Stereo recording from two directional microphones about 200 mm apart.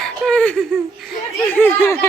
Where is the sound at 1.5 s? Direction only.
10° left (ahead or behind).